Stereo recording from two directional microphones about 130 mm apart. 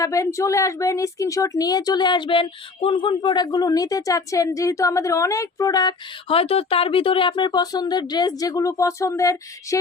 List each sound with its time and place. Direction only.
0.0 s a woman's voice: 25° left (ahead or behind)
6.2 s speech: 50° left (ahead or behind); by 9.7 s 25° left (ahead or behind)